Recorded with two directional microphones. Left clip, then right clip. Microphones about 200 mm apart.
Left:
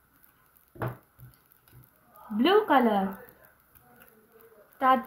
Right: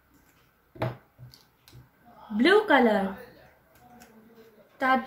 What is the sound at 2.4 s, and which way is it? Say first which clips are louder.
Child singing: right 2 dB; 30° left (ahead or behind).